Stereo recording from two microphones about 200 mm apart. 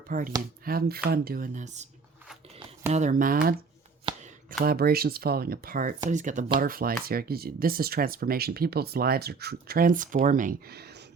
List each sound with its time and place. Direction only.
0.1 s speech: 45° right (ahead or behind)
2.9 s speech: 40° right (ahead or behind); by 11.0 s 55° right (ahead or behind)